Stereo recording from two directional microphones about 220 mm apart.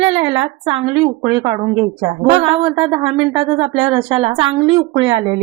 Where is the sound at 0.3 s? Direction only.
20° right (ahead or behind).